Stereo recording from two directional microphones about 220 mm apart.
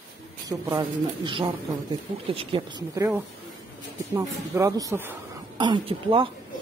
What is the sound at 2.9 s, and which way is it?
A woman's voice, 10° right (ahead or behind).